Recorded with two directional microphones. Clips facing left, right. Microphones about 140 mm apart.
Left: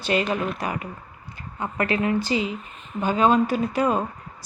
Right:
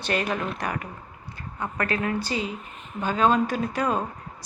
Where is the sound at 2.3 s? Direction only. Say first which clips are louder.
Left 4 dB; 10° left (ahead or behind).